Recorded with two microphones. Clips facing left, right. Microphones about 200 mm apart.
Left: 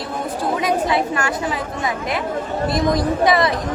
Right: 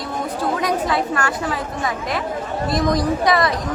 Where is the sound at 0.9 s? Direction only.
20° left (ahead or behind).